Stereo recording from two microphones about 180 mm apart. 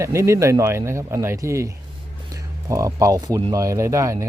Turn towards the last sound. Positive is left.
turn(degrees=-15)  # may be behind; listen again after turning